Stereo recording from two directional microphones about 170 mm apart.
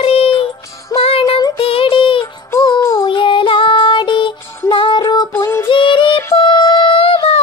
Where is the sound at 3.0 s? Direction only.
30° left (ahead or behind).